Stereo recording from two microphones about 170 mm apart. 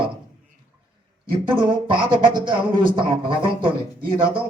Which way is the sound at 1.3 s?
30° right (ahead or behind).